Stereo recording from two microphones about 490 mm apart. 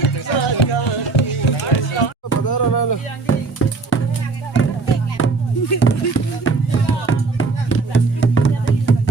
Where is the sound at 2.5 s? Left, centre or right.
Left.